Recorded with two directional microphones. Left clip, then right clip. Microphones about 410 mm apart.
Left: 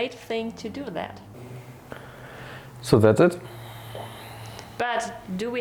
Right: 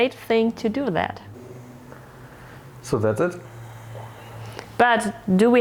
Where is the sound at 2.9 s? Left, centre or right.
Left.